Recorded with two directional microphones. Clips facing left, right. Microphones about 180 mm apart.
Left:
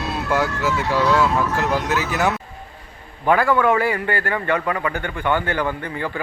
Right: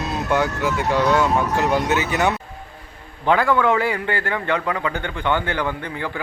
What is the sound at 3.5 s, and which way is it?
Speech, 10° left (ahead or behind).